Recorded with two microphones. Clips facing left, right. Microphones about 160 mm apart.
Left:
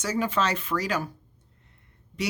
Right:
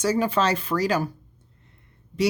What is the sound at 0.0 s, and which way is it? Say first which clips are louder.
Speech: right 4 dB; 35° right (ahead or behind).